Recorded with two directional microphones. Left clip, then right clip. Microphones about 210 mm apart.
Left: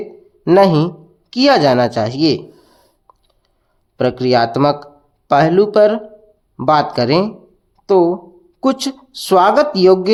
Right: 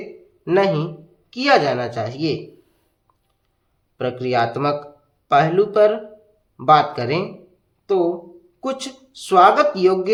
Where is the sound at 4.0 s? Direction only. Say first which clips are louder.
Left 6 dB; 40° left (ahead or behind).